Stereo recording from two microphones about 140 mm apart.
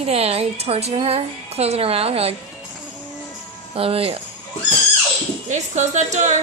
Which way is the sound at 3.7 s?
45° right (ahead or behind).